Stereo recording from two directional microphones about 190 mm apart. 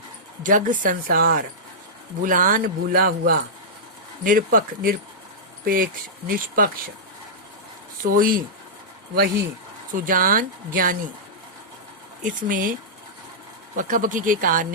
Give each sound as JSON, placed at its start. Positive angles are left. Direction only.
{"t": 0.4, "sound": "speech", "side_deg": -45}
{"t": 8.0, "sound": "speech", "side_deg": -45}
{"t": 9.9, "sound": "speech", "side_deg": -45}
{"t": 12.2, "sound": "speech", "side_deg": -45}
{"t": 13.7, "sound": "speech", "side_deg": -45}